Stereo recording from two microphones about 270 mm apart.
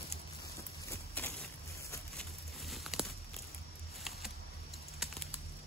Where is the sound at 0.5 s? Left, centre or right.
Centre.